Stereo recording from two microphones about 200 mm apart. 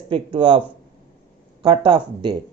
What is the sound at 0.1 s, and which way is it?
Speech, 25° right (ahead or behind).